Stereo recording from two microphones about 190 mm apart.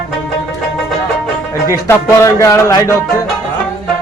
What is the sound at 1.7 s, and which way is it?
Music, 15° left (ahead or behind).